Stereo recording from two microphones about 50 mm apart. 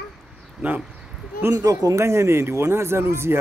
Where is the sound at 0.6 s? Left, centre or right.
Right.